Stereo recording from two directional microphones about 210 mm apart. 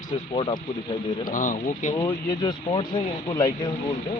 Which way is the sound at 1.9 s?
15° left (ahead or behind).